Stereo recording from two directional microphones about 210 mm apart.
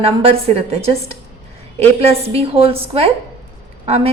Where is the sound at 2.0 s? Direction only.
30° right (ahead or behind).